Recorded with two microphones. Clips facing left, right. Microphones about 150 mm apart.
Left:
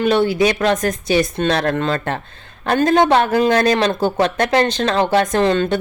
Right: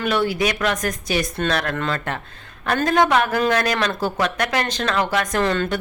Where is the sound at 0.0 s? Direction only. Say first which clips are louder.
Left 6 dB; 25° left (ahead or behind).